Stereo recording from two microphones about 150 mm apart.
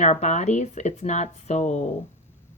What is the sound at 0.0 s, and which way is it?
A woman's voice, 50° left (ahead or behind).